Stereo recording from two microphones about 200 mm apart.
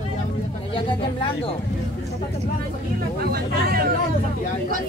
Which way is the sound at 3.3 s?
50° right (ahead or behind).